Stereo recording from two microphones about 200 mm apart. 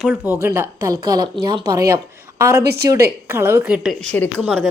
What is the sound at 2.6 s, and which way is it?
Speech, 50° right (ahead or behind).